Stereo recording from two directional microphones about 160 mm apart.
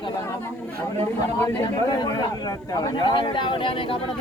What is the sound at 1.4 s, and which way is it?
Speech, 20° left (ahead or behind).